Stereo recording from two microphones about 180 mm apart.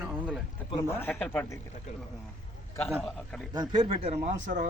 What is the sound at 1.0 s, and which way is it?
Speech, 10° left (ahead or behind).